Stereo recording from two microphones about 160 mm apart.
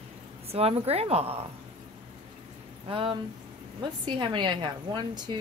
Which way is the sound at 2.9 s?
35° right (ahead or behind).